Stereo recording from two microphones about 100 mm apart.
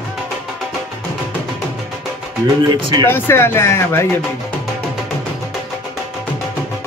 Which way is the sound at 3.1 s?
25° left (ahead or behind).